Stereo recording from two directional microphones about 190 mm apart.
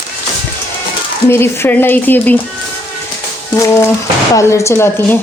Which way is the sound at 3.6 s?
15° left (ahead or behind).